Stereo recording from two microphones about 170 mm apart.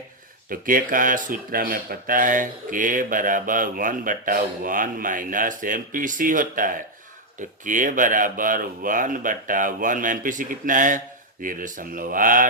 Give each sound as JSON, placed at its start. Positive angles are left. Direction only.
{"t": 0.5, "sound": "speech", "side_deg": -55}